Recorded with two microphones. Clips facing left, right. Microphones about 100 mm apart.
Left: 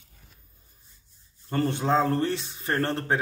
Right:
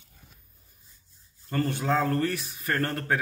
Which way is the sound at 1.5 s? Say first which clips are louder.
Left 2 dB; 25° left (ahead or behind).